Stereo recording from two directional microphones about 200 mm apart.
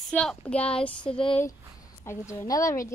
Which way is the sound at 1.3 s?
15° left (ahead or behind).